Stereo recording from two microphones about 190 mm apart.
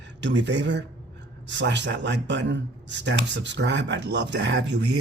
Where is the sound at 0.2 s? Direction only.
70° right (ahead or behind).